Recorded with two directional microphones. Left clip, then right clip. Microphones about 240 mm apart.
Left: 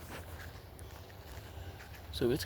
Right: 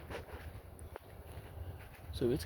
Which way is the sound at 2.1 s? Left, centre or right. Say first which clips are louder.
Left 2 dB; centre.